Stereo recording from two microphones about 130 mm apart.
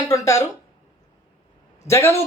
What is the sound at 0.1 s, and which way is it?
Speech, 25° left (ahead or behind).